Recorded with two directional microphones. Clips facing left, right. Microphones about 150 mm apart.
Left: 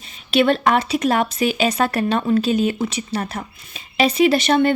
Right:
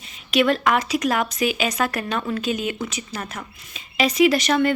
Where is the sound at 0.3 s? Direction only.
30° left (ahead or behind).